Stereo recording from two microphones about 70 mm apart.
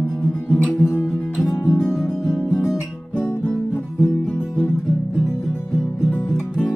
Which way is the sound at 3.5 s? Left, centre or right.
Left.